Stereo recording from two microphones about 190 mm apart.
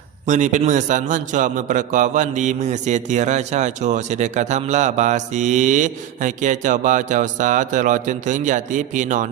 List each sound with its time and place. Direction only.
0.3 s a man's voice: 40° right (ahead or behind)